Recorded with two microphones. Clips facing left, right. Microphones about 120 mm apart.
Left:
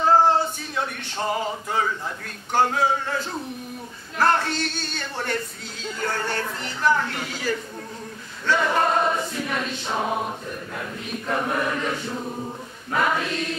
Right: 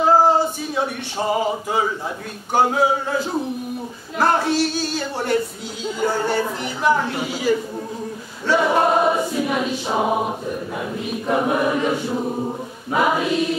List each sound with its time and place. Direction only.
0.0 s a sound: 10° right (ahead or behind)
2.5 s choir: 5° right (ahead or behind)
12.3 s choir: 25° right (ahead or behind)
12.9 s choir: 10° right (ahead or behind)